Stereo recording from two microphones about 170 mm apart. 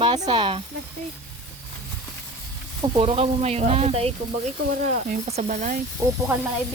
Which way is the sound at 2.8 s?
30° right (ahead or behind).